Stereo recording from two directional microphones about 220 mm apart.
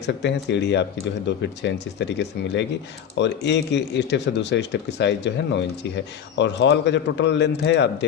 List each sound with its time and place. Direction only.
0.0 s speech: 50° left (ahead or behind)